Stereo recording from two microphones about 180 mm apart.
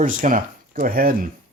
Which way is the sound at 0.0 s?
45° right (ahead or behind).